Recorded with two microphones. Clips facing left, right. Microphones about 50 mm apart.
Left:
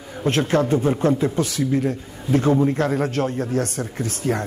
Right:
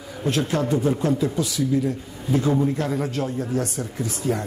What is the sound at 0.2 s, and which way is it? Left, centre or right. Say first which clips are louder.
A man's voice: left 4 dB; left.